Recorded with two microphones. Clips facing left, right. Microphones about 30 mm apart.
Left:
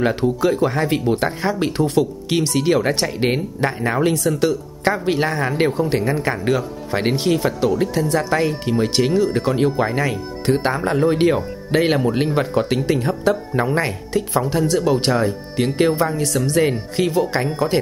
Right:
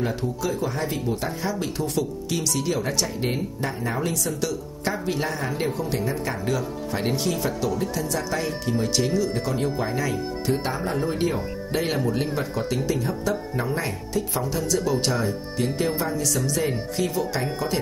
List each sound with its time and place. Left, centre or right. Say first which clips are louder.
0.0 s speech: left 9 dB; left
6.3 s speech: left 6 dB; left